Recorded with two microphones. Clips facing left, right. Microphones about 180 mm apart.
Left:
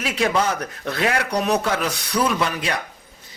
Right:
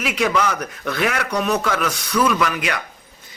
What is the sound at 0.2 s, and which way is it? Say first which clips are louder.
Speech: even; 30° left (ahead or behind).